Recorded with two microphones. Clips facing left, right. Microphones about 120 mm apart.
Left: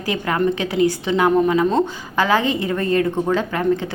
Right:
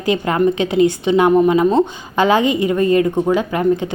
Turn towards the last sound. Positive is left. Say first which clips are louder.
# right 3 dB
turn(degrees=-15)  # may be behind; listen again after turning